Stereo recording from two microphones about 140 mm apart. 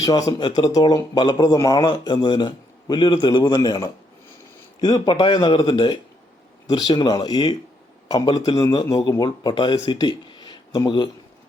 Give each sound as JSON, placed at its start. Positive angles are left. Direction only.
{"t": 0.0, "sound": "a man's voice", "side_deg": 25}